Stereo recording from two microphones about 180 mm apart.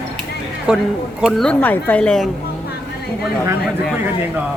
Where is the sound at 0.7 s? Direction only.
5° right (ahead or behind).